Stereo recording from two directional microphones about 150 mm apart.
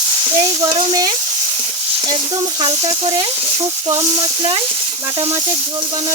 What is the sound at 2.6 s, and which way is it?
Speech, 45° right (ahead or behind).